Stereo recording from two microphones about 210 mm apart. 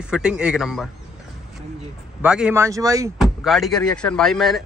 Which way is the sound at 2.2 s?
5° right (ahead or behind).